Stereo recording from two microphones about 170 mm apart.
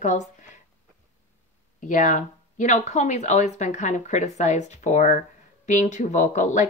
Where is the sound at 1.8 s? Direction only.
50° left (ahead or behind).